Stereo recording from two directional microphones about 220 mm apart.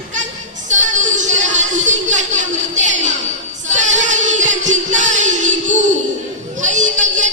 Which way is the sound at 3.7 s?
35° right (ahead or behind).